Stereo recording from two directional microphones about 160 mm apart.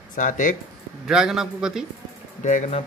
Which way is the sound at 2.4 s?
50° left (ahead or behind).